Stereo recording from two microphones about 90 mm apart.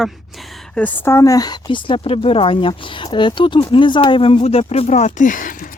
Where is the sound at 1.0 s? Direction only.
35° left (ahead or behind).